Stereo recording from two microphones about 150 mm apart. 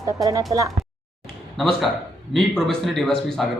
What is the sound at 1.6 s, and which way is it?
A man's voice, centre (ahead or behind).